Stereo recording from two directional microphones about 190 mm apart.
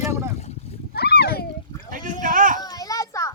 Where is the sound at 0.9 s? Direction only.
55° left (ahead or behind).